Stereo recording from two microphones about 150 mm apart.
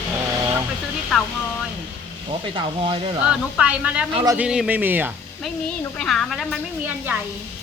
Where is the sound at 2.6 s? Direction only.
35° right (ahead or behind).